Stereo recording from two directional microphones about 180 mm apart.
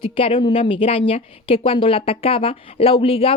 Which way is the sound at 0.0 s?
30° left (ahead or behind).